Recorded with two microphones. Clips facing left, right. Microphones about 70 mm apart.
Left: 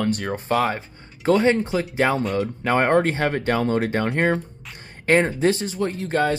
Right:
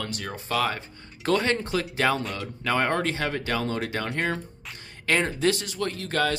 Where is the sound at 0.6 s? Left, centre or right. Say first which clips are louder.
Left 4 dB; left.